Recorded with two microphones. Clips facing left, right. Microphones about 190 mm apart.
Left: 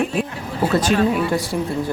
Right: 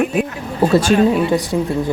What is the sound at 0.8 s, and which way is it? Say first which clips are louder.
Speech: right 4 dB; 20° right (ahead or behind).